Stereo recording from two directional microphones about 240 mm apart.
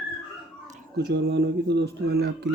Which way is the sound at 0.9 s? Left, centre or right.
Right.